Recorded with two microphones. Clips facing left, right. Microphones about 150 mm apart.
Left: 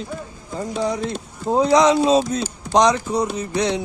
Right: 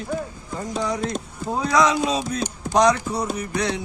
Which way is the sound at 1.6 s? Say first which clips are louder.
Left 5 dB; 25° left (ahead or behind).